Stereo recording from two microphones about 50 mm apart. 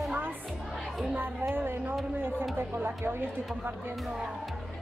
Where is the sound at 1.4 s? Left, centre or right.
Right.